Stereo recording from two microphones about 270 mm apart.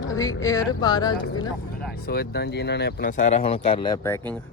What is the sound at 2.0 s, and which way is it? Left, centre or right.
Speech, left.